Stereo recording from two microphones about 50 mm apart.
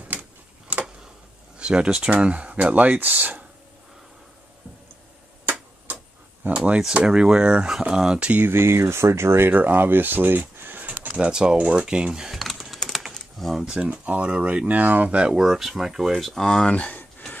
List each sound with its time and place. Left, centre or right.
0.1 s a sound: right
1.6 s speech: centre; by 3.4 s right
5.4 s tick-tock: right
6.4 s speech: right
7.1 s speech: centre
8.4 s speech: right
9.5 s speech: right
11.1 s speech: centre
12.4 s typing: centre
13.6 s speech: centre
15.1 s speech: centre
15.4 s speech: centre
16.4 s speech: centre
16.7 s speech: left